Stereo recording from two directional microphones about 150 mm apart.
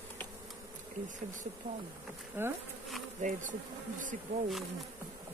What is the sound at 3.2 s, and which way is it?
Bee, 60° right (ahead or behind).